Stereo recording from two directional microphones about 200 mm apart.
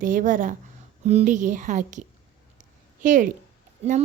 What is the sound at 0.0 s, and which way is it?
A woman's voice, 40° right (ahead or behind).